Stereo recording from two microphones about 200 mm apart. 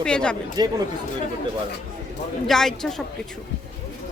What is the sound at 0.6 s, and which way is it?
Speech, 20° right (ahead or behind).